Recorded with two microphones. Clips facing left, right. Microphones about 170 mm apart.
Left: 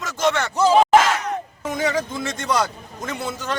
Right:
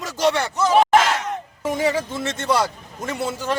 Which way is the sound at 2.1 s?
Centre (ahead or behind).